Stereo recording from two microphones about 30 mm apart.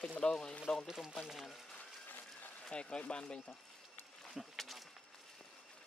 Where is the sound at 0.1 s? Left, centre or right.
Left.